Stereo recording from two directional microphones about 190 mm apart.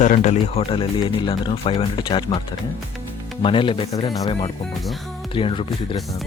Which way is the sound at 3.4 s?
25° left (ahead or behind).